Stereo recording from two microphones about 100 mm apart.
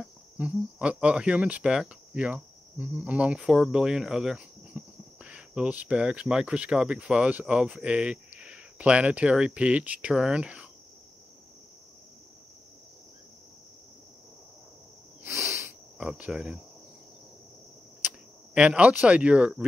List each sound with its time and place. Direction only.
0.4 s speech: 10° right (ahead or behind)
15.2 s a sound: 25° right (ahead or behind)
16.0 s speech: 10° right (ahead or behind)
18.5 s speech: 10° right (ahead or behind)